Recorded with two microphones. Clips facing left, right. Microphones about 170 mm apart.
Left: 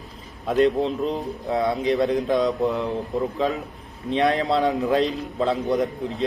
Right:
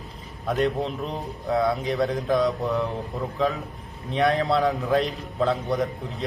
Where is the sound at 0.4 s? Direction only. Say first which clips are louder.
Left 5 dB; centre (ahead or behind).